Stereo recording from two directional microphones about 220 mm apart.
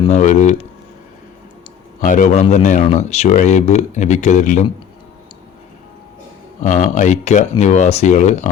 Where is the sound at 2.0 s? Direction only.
35° left (ahead or behind).